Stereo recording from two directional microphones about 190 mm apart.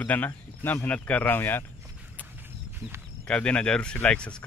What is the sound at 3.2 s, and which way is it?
Speech, 5° left (ahead or behind).